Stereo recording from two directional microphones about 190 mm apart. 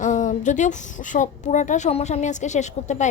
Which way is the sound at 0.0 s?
40° left (ahead or behind).